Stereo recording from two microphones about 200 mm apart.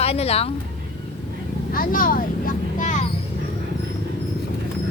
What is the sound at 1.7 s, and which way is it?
Speech, 45° left (ahead or behind).